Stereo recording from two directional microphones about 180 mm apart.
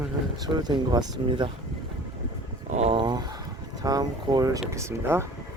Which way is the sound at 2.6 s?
35° right (ahead or behind).